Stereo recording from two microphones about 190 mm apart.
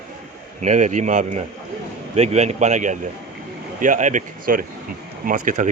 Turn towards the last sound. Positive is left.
turn(degrees=-45)  # may be behind; listen again after turning